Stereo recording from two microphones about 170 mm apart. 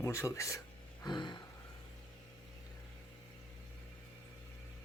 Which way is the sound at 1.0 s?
25° left (ahead or behind).